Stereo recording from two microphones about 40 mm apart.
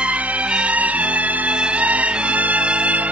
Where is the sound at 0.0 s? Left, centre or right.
Right.